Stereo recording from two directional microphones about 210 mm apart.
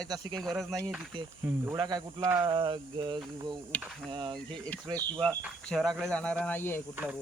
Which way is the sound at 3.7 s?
5° left (ahead or behind).